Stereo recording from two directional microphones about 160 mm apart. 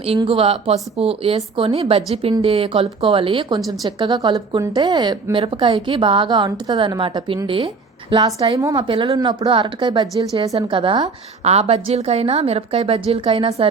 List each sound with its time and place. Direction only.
0.2 s a woman's voice: 35° right (ahead or behind)
11.4 s a woman's voice: 40° right (ahead or behind)